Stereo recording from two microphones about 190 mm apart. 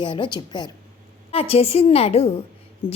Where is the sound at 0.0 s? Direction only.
25° left (ahead or behind).